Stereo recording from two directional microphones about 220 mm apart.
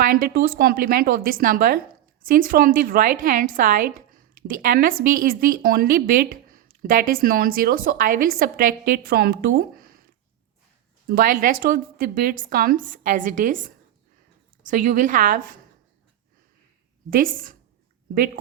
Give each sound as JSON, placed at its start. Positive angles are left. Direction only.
{"t": 0.0, "sound": "a woman's voice", "side_deg": -40}
{"t": 11.1, "sound": "a woman's voice", "side_deg": -40}
{"t": 17.1, "sound": "a woman's voice", "side_deg": -40}